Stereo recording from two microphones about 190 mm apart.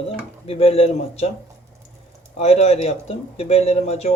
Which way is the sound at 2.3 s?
35° left (ahead or behind).